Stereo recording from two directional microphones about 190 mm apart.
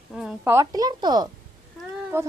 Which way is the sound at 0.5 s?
20° right (ahead or behind).